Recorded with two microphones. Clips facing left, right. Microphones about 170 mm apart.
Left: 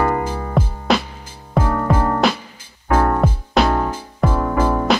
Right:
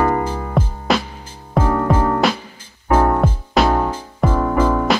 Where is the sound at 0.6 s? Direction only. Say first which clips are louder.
Left 1 dB; centre (ahead or behind).